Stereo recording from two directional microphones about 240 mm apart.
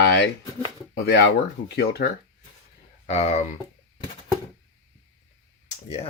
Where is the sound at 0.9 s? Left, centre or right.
Left.